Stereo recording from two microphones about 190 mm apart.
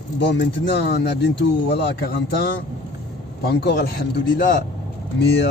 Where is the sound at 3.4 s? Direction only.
60° left (ahead or behind).